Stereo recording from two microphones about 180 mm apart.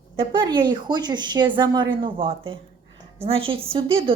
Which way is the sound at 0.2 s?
25° right (ahead or behind).